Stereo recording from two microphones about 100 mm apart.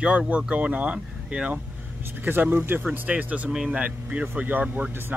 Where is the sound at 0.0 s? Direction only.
10° right (ahead or behind).